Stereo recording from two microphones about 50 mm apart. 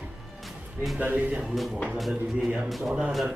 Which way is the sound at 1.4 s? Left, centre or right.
Centre.